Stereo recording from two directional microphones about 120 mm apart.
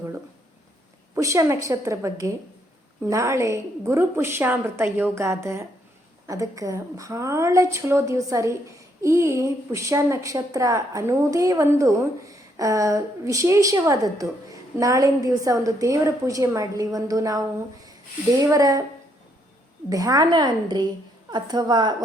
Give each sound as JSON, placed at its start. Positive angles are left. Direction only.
{"t": 1.1, "sound": "a woman's voice", "side_deg": -25}
{"t": 19.9, "sound": "a woman's voice", "side_deg": -30}